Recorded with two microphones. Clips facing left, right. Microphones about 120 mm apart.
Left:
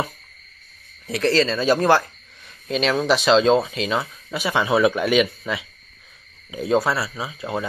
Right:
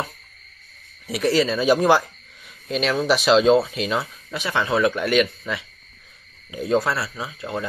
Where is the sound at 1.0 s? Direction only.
10° right (ahead or behind).